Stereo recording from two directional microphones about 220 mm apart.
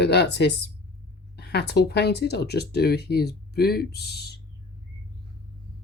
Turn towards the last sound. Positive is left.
turn(degrees=50)  # may be behind; listen again after turning